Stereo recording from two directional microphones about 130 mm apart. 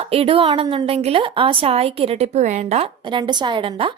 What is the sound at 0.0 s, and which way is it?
A woman's voice, 50° right (ahead or behind).